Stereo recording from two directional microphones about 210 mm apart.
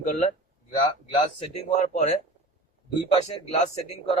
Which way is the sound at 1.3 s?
30° left (ahead or behind).